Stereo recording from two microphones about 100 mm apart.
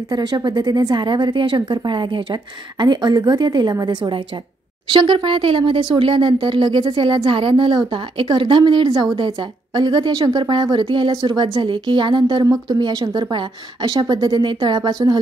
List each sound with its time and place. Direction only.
0.1 s speech: 45° right (ahead or behind)